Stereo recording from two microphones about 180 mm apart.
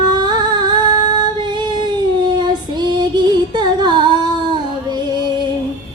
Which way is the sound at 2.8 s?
25° right (ahead or behind).